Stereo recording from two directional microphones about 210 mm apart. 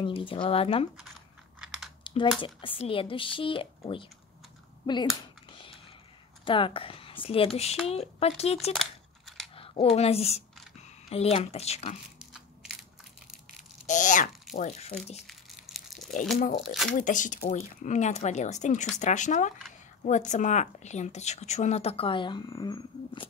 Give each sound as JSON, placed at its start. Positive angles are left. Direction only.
{"t": 0.0, "sound": "speech", "side_deg": 25}
{"t": 1.6, "sound": "typing", "side_deg": 0}
{"t": 2.4, "sound": "speech", "side_deg": 25}
{"t": 5.5, "sound": "a sound", "side_deg": 25}
{"t": 6.4, "sound": "speech", "side_deg": 25}
{"t": 8.7, "sound": "a sound", "side_deg": 0}
{"t": 9.6, "sound": "speech", "side_deg": 30}
{"t": 13.8, "sound": "speech", "side_deg": 35}
{"t": 15.2, "sound": "crumpling", "side_deg": 0}
{"t": 16.3, "sound": "speech", "side_deg": 40}
{"t": 16.6, "sound": "speech", "side_deg": 0}
{"t": 17.0, "sound": "speech", "side_deg": 35}